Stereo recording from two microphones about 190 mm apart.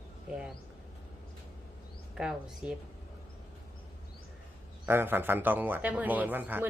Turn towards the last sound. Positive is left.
turn(degrees=-10)  # may be behind; listen again after turning